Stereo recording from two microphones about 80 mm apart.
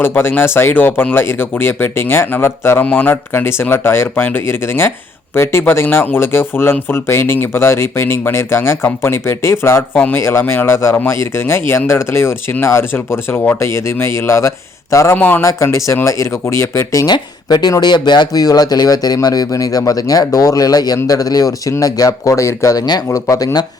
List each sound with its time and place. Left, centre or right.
0.0 s speech: left
15.1 s speech: left
15.4 s speech: left
17.1 s speech: left